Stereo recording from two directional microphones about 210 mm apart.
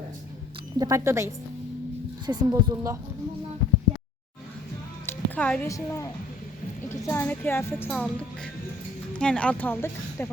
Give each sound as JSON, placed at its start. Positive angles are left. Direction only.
{"t": 0.8, "sound": "speech", "side_deg": -15}
{"t": 5.0, "sound": "speech", "side_deg": 5}